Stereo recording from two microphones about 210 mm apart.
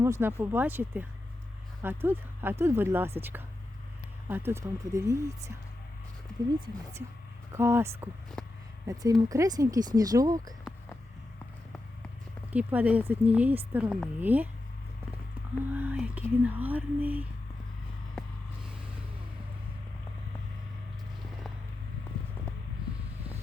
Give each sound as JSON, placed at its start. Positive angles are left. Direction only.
{"t": 0.0, "sound": "speech", "side_deg": -10}
{"t": 7.5, "sound": "speech", "side_deg": -10}
{"t": 8.4, "sound": "a sound", "side_deg": 5}
{"t": 8.9, "sound": "speech", "side_deg": -15}
{"t": 12.5, "sound": "speech", "side_deg": -5}
{"t": 15.7, "sound": "speech", "side_deg": -10}